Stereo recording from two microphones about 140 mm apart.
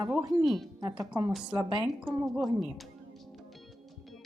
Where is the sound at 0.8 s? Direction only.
30° right (ahead or behind).